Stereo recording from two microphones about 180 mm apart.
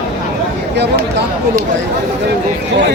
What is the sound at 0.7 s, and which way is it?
Speech, 70° right (ahead or behind).